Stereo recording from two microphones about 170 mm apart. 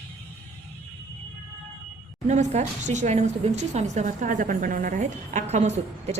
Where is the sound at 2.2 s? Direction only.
40° right (ahead or behind).